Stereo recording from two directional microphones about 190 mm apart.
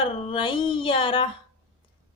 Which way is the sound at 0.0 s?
25° left (ahead or behind).